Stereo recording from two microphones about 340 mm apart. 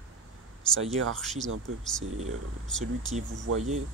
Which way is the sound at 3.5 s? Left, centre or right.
Right.